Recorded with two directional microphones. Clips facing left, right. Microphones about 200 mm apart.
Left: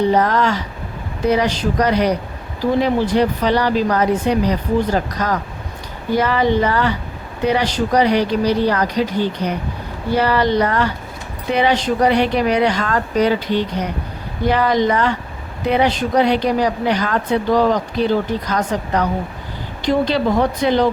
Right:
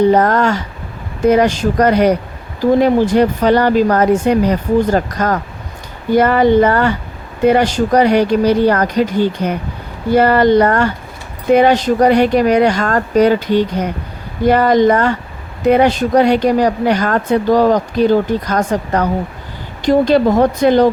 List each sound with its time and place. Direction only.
0.0 s speech: 50° right (ahead or behind)